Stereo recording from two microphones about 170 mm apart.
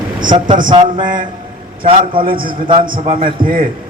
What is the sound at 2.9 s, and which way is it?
Speech, 30° right (ahead or behind).